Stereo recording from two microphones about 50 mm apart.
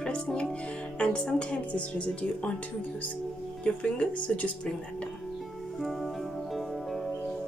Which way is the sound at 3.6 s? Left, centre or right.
Left.